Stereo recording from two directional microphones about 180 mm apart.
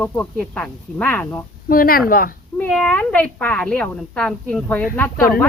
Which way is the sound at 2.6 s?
5° left (ahead or behind).